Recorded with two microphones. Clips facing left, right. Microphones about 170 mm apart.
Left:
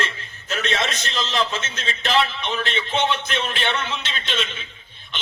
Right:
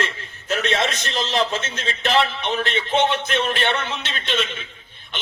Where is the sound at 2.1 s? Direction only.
50° right (ahead or behind).